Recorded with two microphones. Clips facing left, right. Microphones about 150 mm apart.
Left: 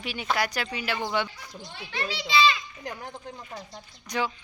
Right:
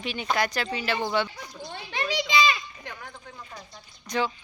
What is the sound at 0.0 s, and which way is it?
Speech, 5° left (ahead or behind).